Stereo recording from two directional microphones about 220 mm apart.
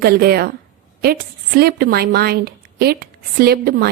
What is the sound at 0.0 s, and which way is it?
Speech, 45° right (ahead or behind).